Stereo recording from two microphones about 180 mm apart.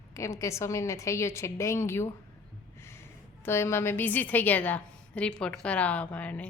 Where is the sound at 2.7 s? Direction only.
15° left (ahead or behind).